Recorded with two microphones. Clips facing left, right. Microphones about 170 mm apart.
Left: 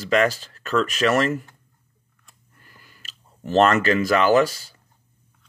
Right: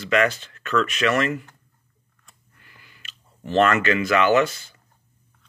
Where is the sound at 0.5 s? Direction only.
40° left (ahead or behind).